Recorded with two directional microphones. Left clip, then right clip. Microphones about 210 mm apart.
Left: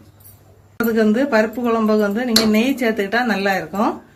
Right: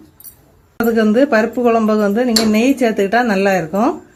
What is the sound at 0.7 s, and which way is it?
Speech, 45° right (ahead or behind).